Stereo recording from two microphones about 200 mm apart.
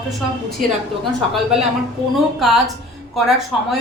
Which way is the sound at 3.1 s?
Centre (ahead or behind).